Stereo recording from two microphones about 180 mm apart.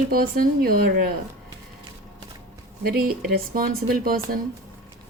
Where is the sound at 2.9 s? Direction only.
55° right (ahead or behind).